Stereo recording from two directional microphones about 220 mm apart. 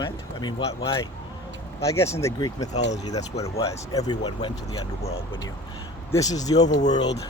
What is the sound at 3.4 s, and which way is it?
Speech, 15° left (ahead or behind).